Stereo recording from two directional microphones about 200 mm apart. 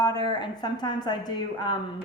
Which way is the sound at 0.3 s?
20° left (ahead or behind).